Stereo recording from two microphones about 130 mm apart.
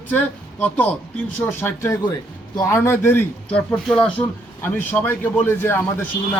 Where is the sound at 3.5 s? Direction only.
5° left (ahead or behind).